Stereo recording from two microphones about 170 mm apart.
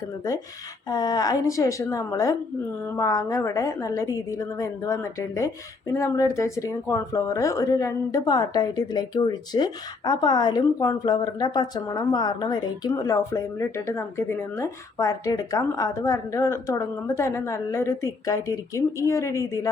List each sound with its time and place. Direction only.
0.9 s a woman's voice: 20° left (ahead or behind)